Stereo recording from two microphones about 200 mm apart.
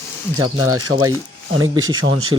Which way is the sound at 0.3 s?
90° right.